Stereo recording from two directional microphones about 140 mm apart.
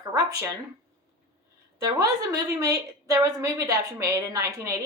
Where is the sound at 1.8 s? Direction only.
25° right (ahead or behind).